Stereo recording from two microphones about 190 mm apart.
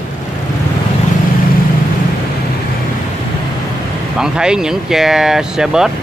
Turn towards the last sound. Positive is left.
turn(degrees=-5)  # may be behind; listen again after turning